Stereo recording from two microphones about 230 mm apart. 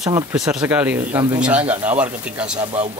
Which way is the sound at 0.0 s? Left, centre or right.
Centre.